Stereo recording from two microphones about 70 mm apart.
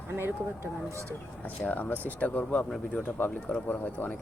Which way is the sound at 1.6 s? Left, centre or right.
Left.